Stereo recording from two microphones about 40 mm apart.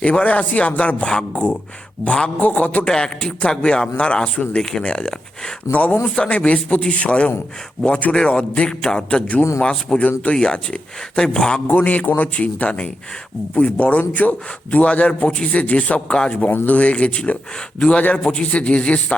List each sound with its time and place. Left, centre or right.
0.0 s a man's voice: left
2.4 s a man's voice: left
2.8 s a man's voice: left
8.8 s a sound: centre
9.6 s speech: left
10.0 s a man's voice: left
10.3 s speech: left
11.7 s a man's voice: left